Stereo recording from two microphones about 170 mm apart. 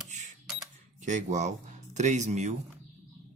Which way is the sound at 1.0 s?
45° right (ahead or behind).